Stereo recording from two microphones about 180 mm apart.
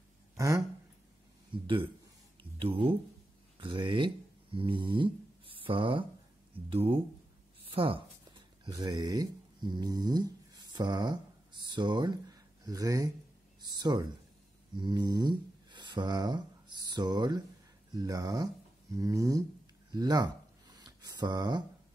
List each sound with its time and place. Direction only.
0.4 s speech: 20° right (ahead or behind)
1.5 s speech: 30° right (ahead or behind)
19.9 s a sound: 20° right (ahead or behind)